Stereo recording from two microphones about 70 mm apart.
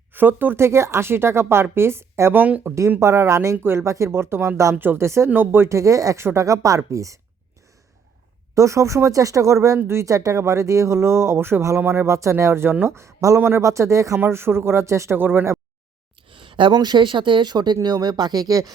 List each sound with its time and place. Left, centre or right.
0.1 s speech: right
4.7 s speech: right
5.7 s speech: right
8.5 s speech: right
14.2 s speech: right
15.1 s speech: right
16.7 s speech: right
17.8 s speech: right